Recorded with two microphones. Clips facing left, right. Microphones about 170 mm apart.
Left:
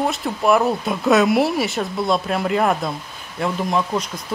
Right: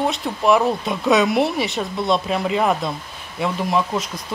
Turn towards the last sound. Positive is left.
turn(degrees=0)  # may be behind; listen again after turning